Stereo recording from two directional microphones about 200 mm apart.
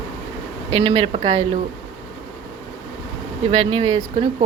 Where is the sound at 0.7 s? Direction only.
30° right (ahead or behind).